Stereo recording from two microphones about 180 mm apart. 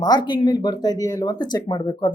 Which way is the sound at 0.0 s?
25° left (ahead or behind).